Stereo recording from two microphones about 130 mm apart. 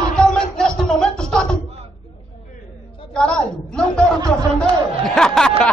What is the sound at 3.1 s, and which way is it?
Speech, 5° left (ahead or behind).